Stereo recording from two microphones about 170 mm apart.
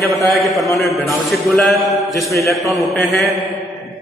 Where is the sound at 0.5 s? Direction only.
Centre (ahead or behind).